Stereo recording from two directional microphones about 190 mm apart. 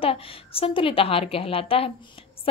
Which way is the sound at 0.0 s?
30° left (ahead or behind).